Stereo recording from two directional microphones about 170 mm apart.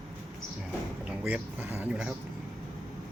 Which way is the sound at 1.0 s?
10° right (ahead or behind).